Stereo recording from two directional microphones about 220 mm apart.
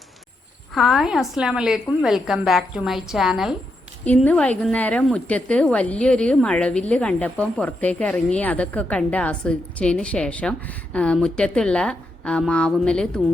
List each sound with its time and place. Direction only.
0.7 s a woman's voice: centre (ahead or behind)